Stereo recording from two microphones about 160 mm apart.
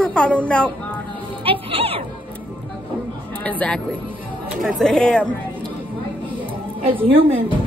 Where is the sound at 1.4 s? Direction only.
35° right (ahead or behind).